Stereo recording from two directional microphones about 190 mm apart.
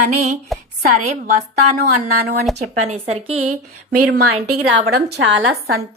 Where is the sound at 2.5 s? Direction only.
35° right (ahead or behind).